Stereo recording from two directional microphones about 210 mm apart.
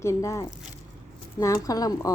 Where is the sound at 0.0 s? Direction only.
15° left (ahead or behind).